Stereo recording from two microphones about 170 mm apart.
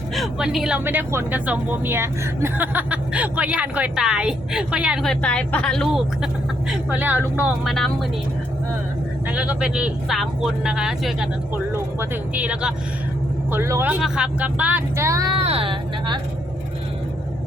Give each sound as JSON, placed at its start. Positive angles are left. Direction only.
{"t": 0.1, "sound": "speech", "side_deg": 0}
{"t": 7.6, "sound": "speech", "side_deg": 0}
{"t": 9.3, "sound": "speech", "side_deg": -5}
{"t": 15.4, "sound": "speech", "side_deg": -35}